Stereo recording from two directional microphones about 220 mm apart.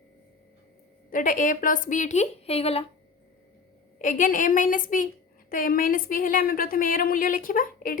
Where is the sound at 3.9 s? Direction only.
35° left (ahead or behind).